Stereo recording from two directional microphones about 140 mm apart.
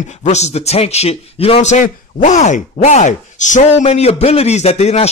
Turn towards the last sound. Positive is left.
turn(degrees=50)  # may be behind; listen again after turning